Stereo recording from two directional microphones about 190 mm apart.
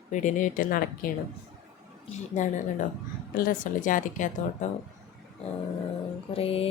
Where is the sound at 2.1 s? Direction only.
40° left (ahead or behind).